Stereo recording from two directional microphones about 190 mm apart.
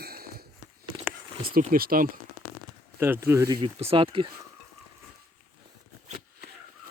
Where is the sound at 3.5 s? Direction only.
30° right (ahead or behind).